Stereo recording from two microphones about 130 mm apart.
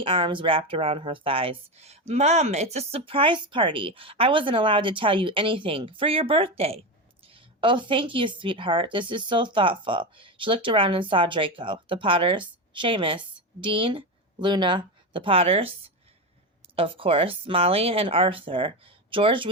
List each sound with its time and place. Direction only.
0.0 s a woman's voice: 40° right (ahead or behind)